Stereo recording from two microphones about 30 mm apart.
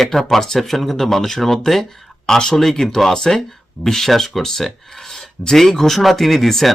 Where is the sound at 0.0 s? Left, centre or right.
Centre.